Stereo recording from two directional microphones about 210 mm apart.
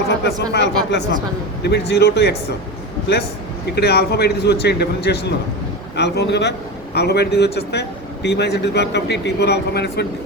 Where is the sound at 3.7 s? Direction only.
50° left (ahead or behind).